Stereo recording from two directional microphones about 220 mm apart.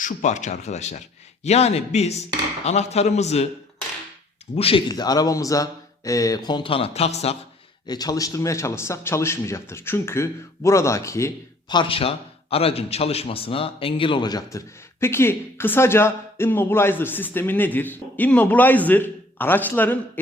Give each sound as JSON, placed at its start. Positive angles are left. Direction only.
{"t": 0.0, "sound": "a man's voice", "side_deg": 35}
{"t": 4.5, "sound": "speech", "side_deg": 25}
{"t": 7.9, "sound": "a man's voice", "side_deg": 15}